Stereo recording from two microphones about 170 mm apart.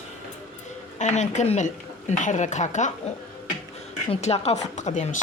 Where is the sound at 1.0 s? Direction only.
45° left (ahead or behind).